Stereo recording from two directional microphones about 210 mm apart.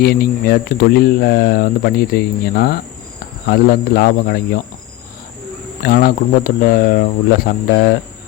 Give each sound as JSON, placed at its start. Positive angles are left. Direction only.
{"t": 0.0, "sound": "speech", "side_deg": 45}
{"t": 5.8, "sound": "speech", "side_deg": 45}